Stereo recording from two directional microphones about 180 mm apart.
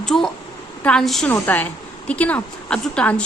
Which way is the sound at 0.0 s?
5° left (ahead or behind).